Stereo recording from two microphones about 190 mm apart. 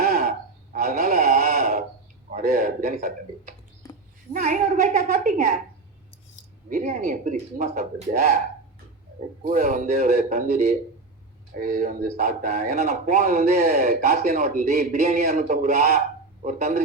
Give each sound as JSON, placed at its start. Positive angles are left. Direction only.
{"t": 0.0, "sound": "a sound", "side_deg": -50}
{"t": 2.3, "sound": "speech", "side_deg": -50}
{"t": 3.8, "sound": "a sound", "side_deg": 20}
{"t": 4.3, "sound": "speech", "side_deg": -45}
{"t": 6.7, "sound": "speech", "side_deg": -40}
{"t": 9.5, "sound": "a man's voice", "side_deg": -45}